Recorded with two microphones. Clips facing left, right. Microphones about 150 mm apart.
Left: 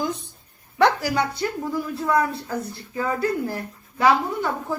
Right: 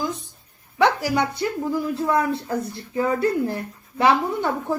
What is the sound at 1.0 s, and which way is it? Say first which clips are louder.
Speech: right 1 dB; 20° right (ahead or behind).